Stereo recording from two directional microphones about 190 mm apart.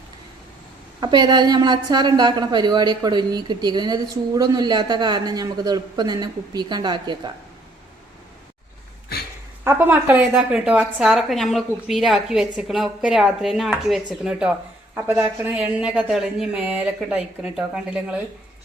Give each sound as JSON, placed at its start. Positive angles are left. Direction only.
{"t": 1.0, "sound": "a woman's voice", "side_deg": -25}
{"t": 9.6, "sound": "a woman's voice", "side_deg": -10}